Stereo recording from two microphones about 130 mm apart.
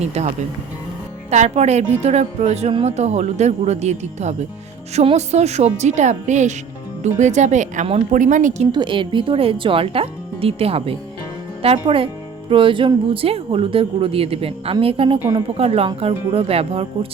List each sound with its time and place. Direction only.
0.0 s speech: 60° right (ahead or behind)
1.3 s speech: 60° right (ahead or behind)
8.1 s speech: 80° right
8.7 s speech: 40° right (ahead or behind)